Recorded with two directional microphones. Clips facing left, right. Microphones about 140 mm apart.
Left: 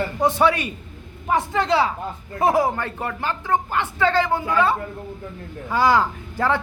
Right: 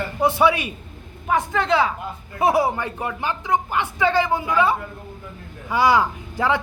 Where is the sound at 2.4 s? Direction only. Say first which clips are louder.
Even; 15° right (ahead or behind).